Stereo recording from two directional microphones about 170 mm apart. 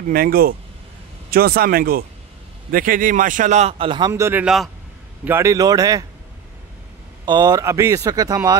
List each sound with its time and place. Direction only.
0.1 s speech: 60° right (ahead or behind); by 4.1 s 30° right (ahead or behind)
4.1 s a man's voice: 15° right (ahead or behind)
7.2 s speech: 25° right (ahead or behind)